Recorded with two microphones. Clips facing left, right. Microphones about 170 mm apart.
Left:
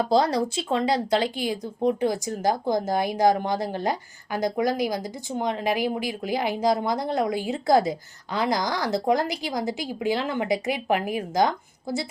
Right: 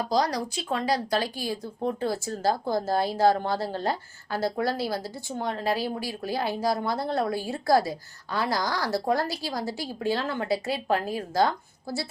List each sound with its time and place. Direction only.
0.0 s speech: 25° left (ahead or behind)